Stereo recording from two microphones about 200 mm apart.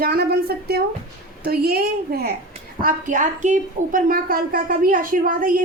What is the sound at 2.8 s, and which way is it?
A woman's voice, 40° right (ahead or behind).